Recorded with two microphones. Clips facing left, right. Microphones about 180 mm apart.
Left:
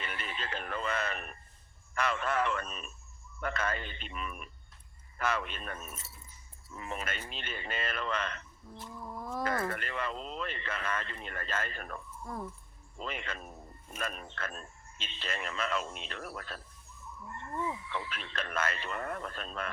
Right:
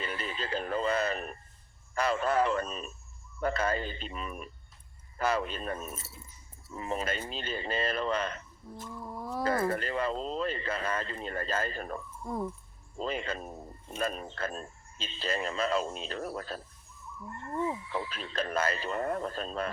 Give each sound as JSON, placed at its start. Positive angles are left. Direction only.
{"t": 0.0, "sound": "a sound", "side_deg": -35}
{"t": 2.0, "sound": "speech", "side_deg": -35}
{"t": 12.2, "sound": "speech", "side_deg": -20}
{"t": 13.0, "sound": "speech", "side_deg": -35}
{"t": 17.7, "sound": "speech", "side_deg": -35}